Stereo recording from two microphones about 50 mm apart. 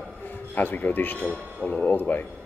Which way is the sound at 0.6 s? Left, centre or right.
Left.